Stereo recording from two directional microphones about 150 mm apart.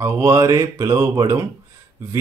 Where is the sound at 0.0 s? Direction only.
20° right (ahead or behind).